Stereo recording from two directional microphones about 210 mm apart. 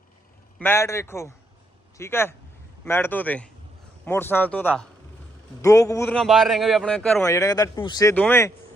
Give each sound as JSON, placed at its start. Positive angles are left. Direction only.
{"t": 0.6, "sound": "speech", "side_deg": 10}
{"t": 7.3, "sound": "speech", "side_deg": 15}